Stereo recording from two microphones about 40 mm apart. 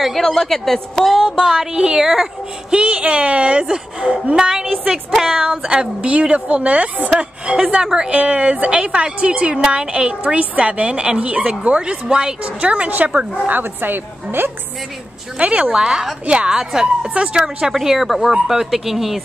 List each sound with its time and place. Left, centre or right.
0.0 s a woman's voice: centre
1.4 s a woman's voice: centre
2.7 s a woman's voice: right
7.7 s a woman's voice: centre
8.1 s a woman's voice: right
12.5 s speech: right
13.5 s a woman's voice: right
15.3 s a woman's voice: right
15.7 s a woman's voice: centre
17.7 s a woman's voice: centre